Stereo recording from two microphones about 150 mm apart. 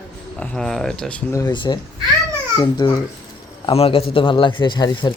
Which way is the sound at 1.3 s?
25° left (ahead or behind).